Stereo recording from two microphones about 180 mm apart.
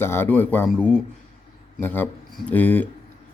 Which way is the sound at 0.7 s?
5° right (ahead or behind).